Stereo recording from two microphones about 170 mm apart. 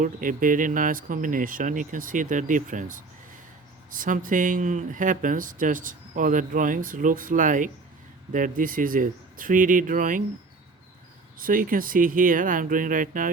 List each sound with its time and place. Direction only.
0.0 s speech: 50° right (ahead or behind)
11.3 s speech: 55° right (ahead or behind)